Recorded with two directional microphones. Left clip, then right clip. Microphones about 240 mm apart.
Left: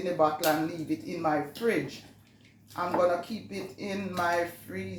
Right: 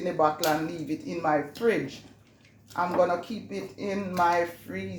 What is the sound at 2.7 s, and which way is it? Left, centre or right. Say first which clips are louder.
Speech: right 2 dB; right.